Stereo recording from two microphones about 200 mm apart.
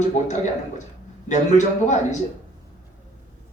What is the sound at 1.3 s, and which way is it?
Speech, 35° left (ahead or behind).